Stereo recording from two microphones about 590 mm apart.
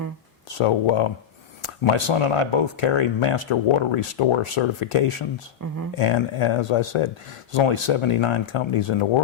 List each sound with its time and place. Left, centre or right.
0.4 s speech: left
5.6 s speech: right
6.0 s speech: left